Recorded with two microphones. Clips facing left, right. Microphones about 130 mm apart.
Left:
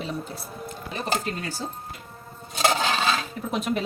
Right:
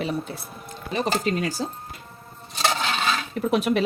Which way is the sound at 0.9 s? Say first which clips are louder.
Right 5 dB; 85° right.